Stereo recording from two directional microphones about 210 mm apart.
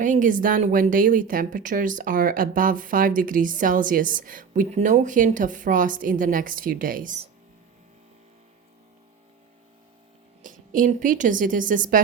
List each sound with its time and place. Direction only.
0.0 s speech: 40° right (ahead or behind)
10.4 s a woman's voice: 40° right (ahead or behind)